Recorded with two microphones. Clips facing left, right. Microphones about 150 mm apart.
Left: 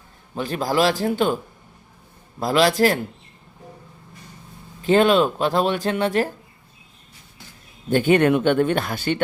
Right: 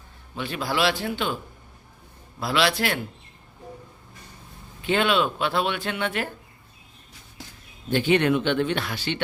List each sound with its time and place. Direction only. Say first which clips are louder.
0.3 s speech: left 5 dB; 40° left (ahead or behind)
2.4 s speech: left 6 dB; 45° left (ahead or behind)
4.8 s speech: left 6 dB; 40° left (ahead or behind)
7.9 s speech: left 4 dB; 45° left (ahead or behind)